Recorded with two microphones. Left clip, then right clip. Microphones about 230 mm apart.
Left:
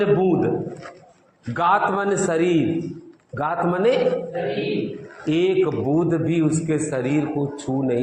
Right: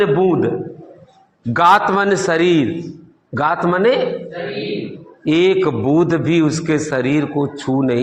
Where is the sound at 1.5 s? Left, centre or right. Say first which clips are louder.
Right 7 dB; right.